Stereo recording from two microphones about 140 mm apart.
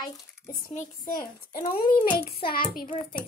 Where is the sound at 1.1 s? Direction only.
90° left.